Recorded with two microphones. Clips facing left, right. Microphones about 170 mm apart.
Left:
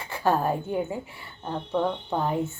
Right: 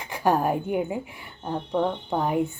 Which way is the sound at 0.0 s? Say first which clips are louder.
Right 2 dB; 15° right (ahead or behind).